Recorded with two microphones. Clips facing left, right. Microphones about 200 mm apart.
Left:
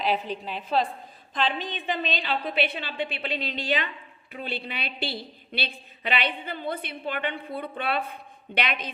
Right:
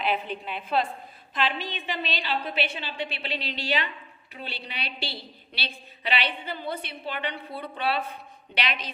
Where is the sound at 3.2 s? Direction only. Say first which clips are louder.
Left 2 dB; 50° left (ahead or behind).